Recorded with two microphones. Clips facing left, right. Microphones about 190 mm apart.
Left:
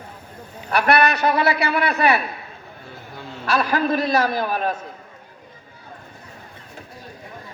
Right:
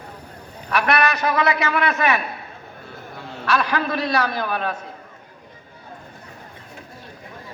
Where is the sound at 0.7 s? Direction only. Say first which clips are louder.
Left 2 dB; 35° left (ahead or behind).